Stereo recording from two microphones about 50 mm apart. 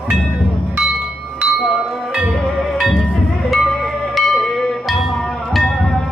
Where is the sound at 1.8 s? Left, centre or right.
Centre.